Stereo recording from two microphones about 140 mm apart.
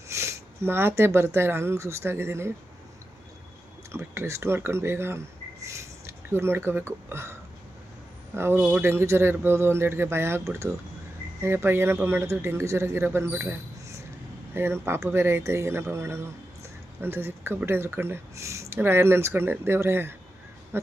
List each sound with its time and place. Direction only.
0.1 s speech: 20° right (ahead or behind)
3.9 s speech: 20° right (ahead or behind)
8.4 s speech: 15° right (ahead or behind)